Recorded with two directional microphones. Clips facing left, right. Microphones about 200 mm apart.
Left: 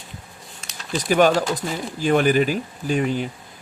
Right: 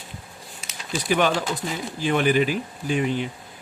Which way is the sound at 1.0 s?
45° left (ahead or behind).